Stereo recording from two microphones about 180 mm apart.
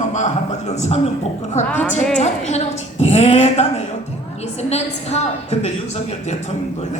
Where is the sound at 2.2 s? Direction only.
35° left (ahead or behind).